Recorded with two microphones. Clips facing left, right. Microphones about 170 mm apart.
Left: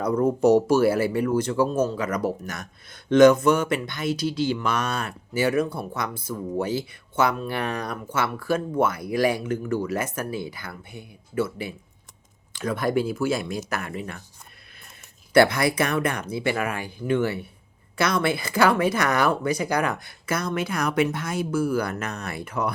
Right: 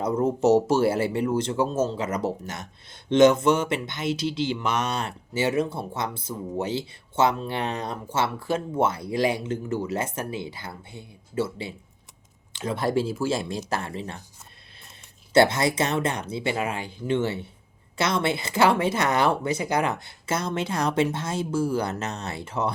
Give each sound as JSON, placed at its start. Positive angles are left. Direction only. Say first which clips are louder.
{"t": 0.0, "sound": "speech", "louder": "left 2 dB", "side_deg": -25}
{"t": 15.3, "sound": "speech", "louder": "left 1 dB", "side_deg": -25}